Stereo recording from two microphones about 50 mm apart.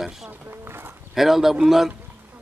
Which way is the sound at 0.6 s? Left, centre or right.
Right.